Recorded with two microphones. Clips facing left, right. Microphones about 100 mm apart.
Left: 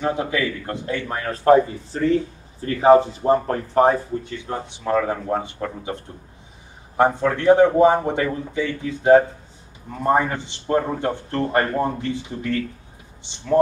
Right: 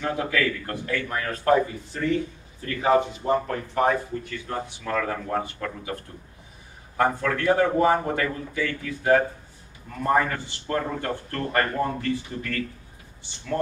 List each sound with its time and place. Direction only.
0.0 s a man's voice: 20° left (ahead or behind)